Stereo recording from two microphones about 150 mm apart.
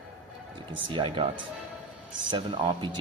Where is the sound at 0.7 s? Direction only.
35° right (ahead or behind).